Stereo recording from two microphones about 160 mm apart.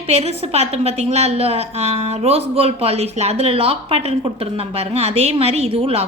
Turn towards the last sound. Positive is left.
turn(degrees=-35)  # may be behind; listen again after turning